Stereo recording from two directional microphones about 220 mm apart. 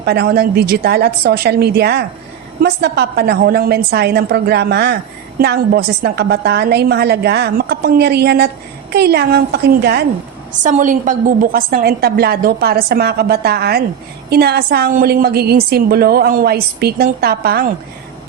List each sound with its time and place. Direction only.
0.0 s a woman's voice: 45° right (ahead or behind)
10.6 s a woman's voice: 35° right (ahead or behind)